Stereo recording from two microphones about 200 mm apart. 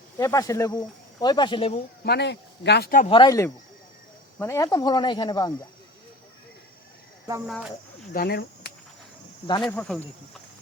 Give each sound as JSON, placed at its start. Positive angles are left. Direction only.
{"t": 0.2, "sound": "speech", "side_deg": 15}
{"t": 2.0, "sound": "speech", "side_deg": 55}
{"t": 3.1, "sound": "speech", "side_deg": 20}
{"t": 7.4, "sound": "speech", "side_deg": 0}
{"t": 8.1, "sound": "speech", "side_deg": 50}
{"t": 9.5, "sound": "speech", "side_deg": 20}
{"t": 9.7, "sound": "speech", "side_deg": 5}